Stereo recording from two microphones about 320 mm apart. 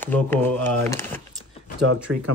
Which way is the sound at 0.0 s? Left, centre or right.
Centre.